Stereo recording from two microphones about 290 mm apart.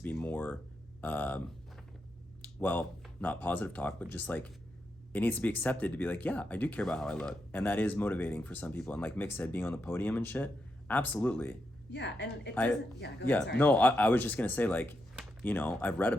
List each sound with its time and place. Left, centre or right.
0.0 s a sound: centre
1.0 s speech: centre
11.9 s a woman's voice: left
13.2 s speech: centre